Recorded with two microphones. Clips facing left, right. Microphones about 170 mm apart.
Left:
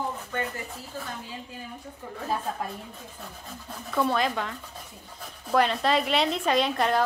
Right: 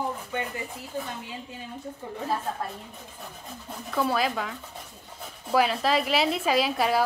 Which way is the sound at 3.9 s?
5° right (ahead or behind).